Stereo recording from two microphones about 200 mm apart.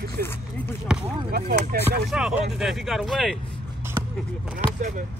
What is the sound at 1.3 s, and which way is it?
Speech, 50° right (ahead or behind).